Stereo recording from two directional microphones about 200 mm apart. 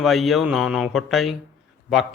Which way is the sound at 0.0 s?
Centre (ahead or behind).